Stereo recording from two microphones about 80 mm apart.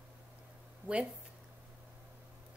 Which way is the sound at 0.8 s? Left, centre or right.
Right.